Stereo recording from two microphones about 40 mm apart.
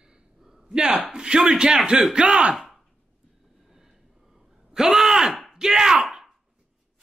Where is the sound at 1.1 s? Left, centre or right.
Centre.